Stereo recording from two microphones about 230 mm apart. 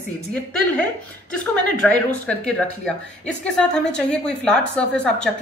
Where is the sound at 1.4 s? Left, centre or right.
Centre.